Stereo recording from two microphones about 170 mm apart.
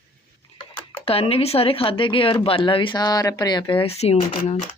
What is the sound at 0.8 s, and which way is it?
Speech, 30° left (ahead or behind).